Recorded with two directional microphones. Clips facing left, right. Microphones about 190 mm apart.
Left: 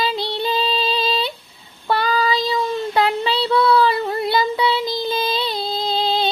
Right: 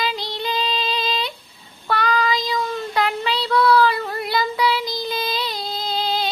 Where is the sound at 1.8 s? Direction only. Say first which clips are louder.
Left 2 dB; 30° left (ahead or behind).